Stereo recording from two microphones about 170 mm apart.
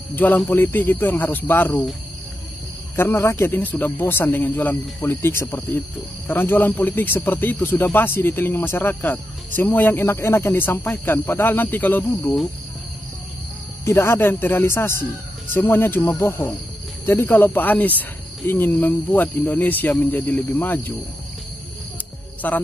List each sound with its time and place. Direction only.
0.1 s speech: 10° left (ahead or behind)
3.0 s speech: 15° left (ahead or behind)
13.8 s speech: 15° left (ahead or behind)
22.4 s speech: 10° left (ahead or behind)